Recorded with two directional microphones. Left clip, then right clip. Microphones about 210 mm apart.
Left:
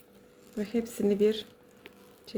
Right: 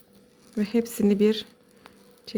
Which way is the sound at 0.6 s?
45° right (ahead or behind).